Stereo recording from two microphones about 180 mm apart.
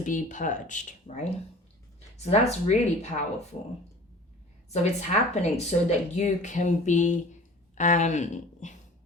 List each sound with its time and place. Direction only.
0.0 s speech: 45° left (ahead or behind)
4.7 s speech: 40° left (ahead or behind)
7.8 s a sound: 45° left (ahead or behind)